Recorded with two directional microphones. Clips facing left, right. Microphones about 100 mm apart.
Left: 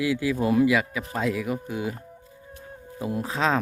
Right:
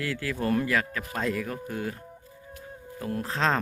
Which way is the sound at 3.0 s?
10° left (ahead or behind).